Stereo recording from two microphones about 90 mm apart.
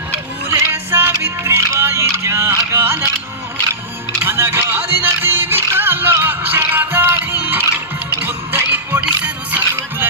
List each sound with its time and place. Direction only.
0.4 s music: 25° right (ahead or behind)
4.2 s music: 25° right (ahead or behind)